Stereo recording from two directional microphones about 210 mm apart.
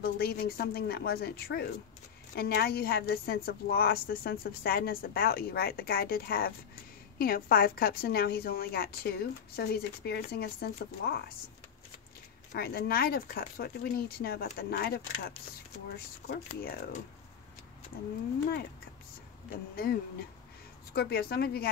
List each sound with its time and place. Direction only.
0.0 s a woman's voice: 45° left (ahead or behind)
12.5 s a woman's voice: 50° left (ahead or behind)
19.7 s a woman's voice: 45° left (ahead or behind)